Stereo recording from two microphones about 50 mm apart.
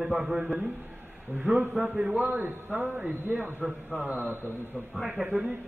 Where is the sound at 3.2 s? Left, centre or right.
Right.